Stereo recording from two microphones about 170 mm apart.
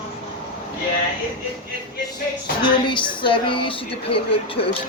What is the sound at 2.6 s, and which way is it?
A woman's voice, 30° left (ahead or behind).